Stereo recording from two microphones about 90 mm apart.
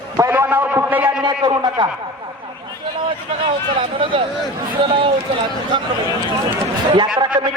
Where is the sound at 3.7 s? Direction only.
70° right (ahead or behind).